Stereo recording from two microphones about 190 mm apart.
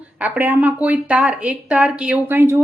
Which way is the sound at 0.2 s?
10° right (ahead or behind).